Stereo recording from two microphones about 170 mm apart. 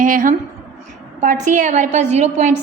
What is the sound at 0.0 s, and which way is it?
A woman's voice, 50° right (ahead or behind).